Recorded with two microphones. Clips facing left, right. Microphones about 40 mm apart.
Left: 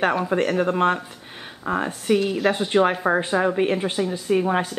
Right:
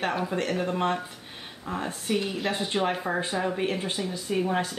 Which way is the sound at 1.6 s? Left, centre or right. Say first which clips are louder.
Left 9 dB; left.